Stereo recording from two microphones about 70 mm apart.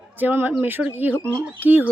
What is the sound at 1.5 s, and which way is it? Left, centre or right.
Speech, right.